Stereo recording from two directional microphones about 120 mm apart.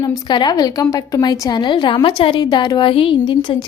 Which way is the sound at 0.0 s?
35° left (ahead or behind).